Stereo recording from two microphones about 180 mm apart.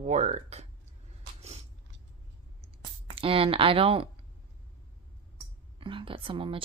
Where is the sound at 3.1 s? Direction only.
30° right (ahead or behind).